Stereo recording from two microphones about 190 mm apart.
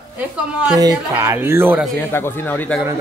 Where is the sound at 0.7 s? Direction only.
20° right (ahead or behind).